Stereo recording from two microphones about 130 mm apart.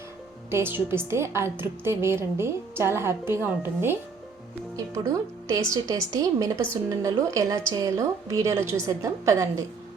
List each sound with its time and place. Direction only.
0.5 s a woman's voice: 20° right (ahead or behind)
5.7 s a woman's voice: 25° right (ahead or behind)